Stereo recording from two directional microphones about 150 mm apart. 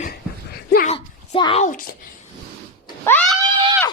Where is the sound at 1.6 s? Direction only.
65° left (ahead or behind).